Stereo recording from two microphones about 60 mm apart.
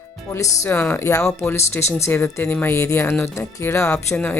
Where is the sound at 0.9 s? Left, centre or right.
Left.